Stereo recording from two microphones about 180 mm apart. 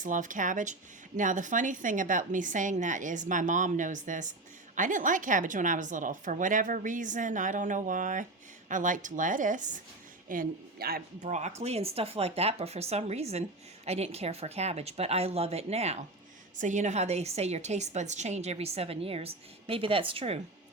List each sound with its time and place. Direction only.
0.0 s a woman's voice: 45° right (ahead or behind)
11.3 s a woman's voice: 40° right (ahead or behind)